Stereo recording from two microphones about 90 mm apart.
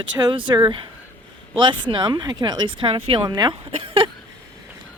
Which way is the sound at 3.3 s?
50° right (ahead or behind).